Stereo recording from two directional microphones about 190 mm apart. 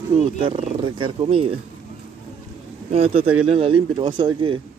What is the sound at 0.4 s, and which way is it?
Speech, 25° right (ahead or behind).